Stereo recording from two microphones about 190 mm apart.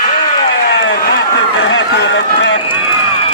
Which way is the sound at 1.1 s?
80° left.